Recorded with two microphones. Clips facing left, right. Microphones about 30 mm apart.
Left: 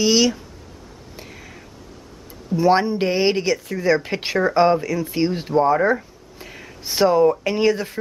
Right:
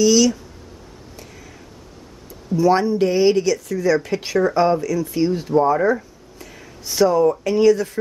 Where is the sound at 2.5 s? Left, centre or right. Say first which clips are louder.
Right 1 dB; left.